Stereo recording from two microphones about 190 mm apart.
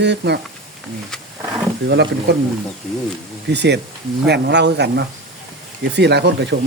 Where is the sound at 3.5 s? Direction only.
65° right (ahead or behind).